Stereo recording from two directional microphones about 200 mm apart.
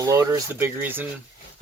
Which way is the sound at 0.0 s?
15° right (ahead or behind).